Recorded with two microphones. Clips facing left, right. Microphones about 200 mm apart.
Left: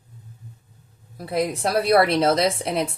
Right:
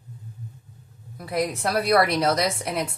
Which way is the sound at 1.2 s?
30° left (ahead or behind).